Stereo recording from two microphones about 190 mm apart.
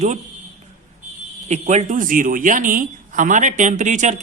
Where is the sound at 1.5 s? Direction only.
35° right (ahead or behind).